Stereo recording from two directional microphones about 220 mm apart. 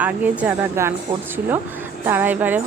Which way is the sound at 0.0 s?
5° right (ahead or behind).